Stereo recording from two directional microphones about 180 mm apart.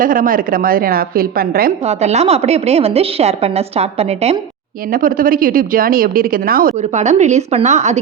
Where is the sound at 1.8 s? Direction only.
35° right (ahead or behind).